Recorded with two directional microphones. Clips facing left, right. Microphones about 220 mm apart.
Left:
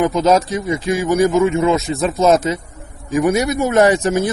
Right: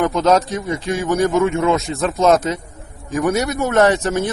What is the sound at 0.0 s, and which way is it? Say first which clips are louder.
Speech: left 1 dB; 5° left (ahead or behind).